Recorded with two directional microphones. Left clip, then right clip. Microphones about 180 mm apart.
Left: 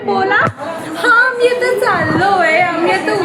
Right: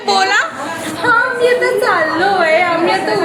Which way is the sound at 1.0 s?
60° left (ahead or behind).